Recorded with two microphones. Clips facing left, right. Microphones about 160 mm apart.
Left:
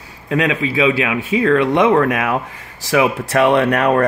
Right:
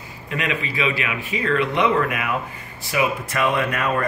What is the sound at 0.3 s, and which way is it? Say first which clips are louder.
A man's voice: left 8 dB; 90° left.